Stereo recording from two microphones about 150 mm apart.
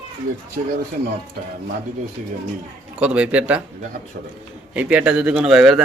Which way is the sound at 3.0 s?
10° right (ahead or behind).